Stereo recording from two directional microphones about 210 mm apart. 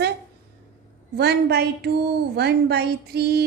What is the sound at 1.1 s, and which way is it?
A woman's voice, 50° right (ahead or behind).